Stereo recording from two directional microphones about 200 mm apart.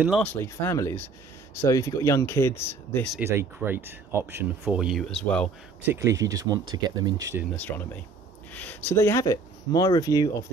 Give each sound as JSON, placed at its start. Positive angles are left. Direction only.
{"t": 0.2, "sound": "speech", "side_deg": 10}
{"t": 3.2, "sound": "speech", "side_deg": -10}
{"t": 5.9, "sound": "speech", "side_deg": -15}
{"t": 7.5, "sound": "speech", "side_deg": 10}